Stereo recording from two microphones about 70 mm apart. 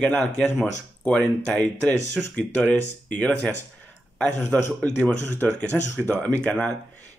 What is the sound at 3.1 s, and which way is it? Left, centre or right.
Speech, centre.